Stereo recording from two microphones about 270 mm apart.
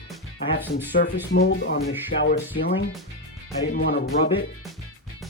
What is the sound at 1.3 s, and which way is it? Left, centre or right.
Speech, left.